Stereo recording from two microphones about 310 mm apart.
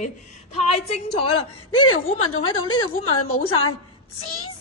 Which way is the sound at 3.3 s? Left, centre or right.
Centre.